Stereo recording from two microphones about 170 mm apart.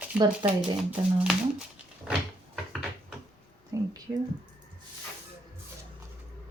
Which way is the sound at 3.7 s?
20° right (ahead or behind).